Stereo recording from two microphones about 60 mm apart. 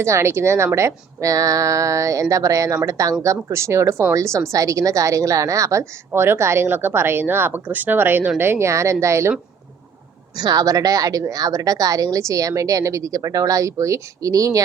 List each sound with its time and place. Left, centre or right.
0.0 s a woman's voice: right
3.2 s a woman's voice: right
6.1 s speech: right
10.5 s a woman's voice: right